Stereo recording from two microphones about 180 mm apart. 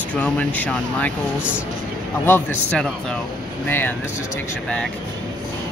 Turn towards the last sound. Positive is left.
turn(degrees=10)  # may be behind; listen again after turning